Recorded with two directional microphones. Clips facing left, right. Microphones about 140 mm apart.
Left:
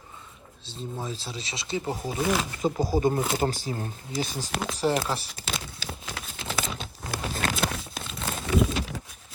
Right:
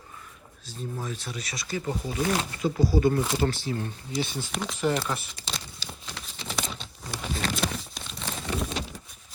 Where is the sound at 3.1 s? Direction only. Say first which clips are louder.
Even; 25° left (ahead or behind).